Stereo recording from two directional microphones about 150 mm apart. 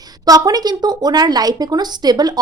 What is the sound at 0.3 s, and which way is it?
Speech, 25° right (ahead or behind).